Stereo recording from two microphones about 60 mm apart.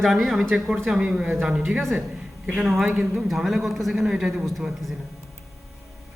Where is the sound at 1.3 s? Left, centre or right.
Right.